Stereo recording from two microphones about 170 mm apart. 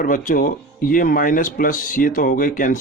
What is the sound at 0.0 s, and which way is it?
Speech, 50° left (ahead or behind).